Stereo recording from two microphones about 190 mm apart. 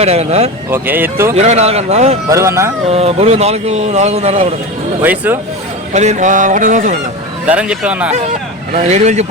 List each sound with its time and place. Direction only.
0.0 s speech: 35° right (ahead or behind)
0.7 s speech: 10° right (ahead or behind)
1.4 s speech: 35° right (ahead or behind)
2.3 s speech: 15° right (ahead or behind)
2.9 s speech: 35° right (ahead or behind)
5.0 s speech: 10° right (ahead or behind)
5.9 s speech: 40° right (ahead or behind)
7.4 s speech: 5° right (ahead or behind)
8.7 s speech: 40° right (ahead or behind)